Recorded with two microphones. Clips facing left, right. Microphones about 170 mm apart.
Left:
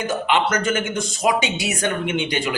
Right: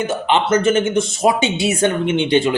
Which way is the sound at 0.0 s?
25° right (ahead or behind).